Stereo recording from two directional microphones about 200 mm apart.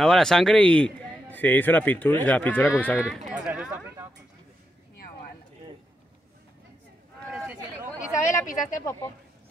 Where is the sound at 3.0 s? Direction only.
Centre (ahead or behind).